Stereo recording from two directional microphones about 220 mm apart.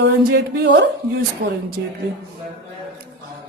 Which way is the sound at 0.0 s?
50° right (ahead or behind).